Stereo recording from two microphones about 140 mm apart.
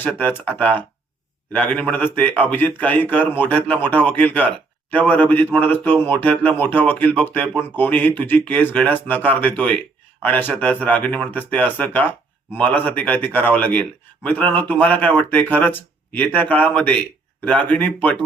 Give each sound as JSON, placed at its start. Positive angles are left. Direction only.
{"t": 0.0, "sound": "speech", "side_deg": 10}